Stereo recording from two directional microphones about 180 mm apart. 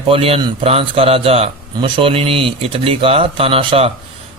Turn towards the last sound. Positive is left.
turn(degrees=-30)  # may be behind; listen again after turning